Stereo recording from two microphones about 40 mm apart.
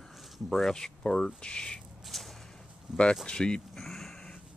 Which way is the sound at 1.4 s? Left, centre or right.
Left.